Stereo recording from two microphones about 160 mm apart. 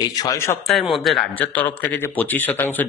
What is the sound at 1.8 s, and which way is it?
Speech, 10° left (ahead or behind).